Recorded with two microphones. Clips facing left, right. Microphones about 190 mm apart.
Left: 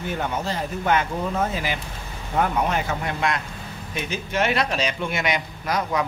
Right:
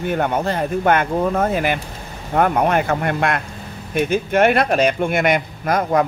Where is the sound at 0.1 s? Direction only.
55° right (ahead or behind).